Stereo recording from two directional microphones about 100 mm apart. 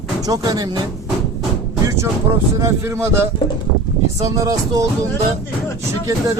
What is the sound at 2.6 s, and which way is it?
Speech, 30° right (ahead or behind).